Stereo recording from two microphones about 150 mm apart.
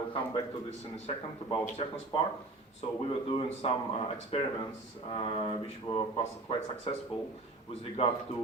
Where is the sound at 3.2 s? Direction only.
40° left (ahead or behind).